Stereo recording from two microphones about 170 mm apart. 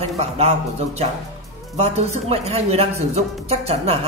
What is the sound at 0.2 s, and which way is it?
Speech, 35° right (ahead or behind).